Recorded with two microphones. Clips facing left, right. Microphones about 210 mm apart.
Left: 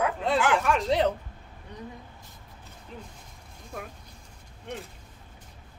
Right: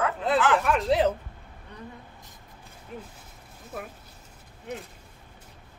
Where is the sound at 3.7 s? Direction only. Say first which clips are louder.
Right 2 dB; 5° right (ahead or behind).